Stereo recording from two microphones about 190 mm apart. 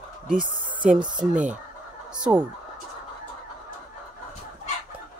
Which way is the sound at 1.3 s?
40° right (ahead or behind).